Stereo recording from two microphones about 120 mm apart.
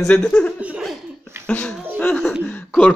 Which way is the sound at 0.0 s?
10° left (ahead or behind).